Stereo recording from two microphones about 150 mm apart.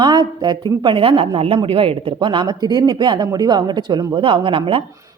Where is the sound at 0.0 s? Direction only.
30° right (ahead or behind).